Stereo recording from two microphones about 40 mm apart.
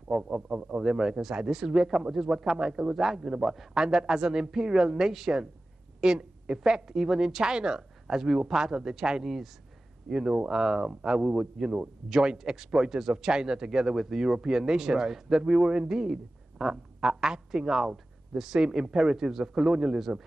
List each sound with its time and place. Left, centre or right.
0.1 s a man's voice: centre
5.9 s a woman's voice: right
10.1 s a man's voice: centre